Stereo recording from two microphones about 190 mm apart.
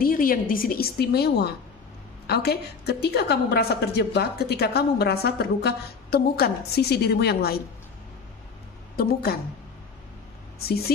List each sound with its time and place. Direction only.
0.0 s a woman's voice: 45° left (ahead or behind)
8.9 s a woman's voice: 55° left (ahead or behind)